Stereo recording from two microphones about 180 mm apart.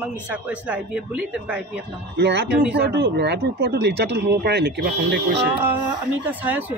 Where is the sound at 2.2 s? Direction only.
70° right (ahead or behind).